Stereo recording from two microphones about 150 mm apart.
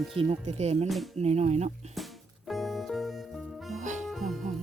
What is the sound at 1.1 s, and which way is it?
Speech, 45° right (ahead or behind).